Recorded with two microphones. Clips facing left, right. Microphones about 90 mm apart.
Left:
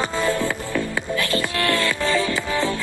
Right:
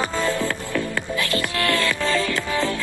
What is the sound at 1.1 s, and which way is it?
Music, 20° left (ahead or behind).